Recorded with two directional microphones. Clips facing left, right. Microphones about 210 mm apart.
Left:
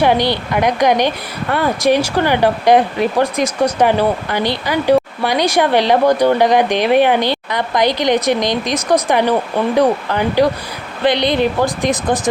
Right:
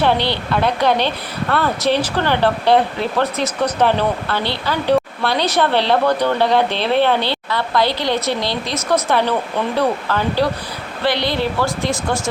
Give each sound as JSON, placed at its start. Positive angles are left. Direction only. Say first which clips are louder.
{"t": 0.0, "sound": "a woman's voice", "louder": "left 3 dB", "side_deg": 15}